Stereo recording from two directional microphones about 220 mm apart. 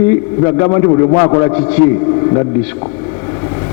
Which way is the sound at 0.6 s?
25° left (ahead or behind).